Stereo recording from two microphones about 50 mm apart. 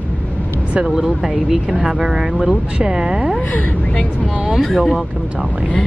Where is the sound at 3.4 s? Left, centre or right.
Left.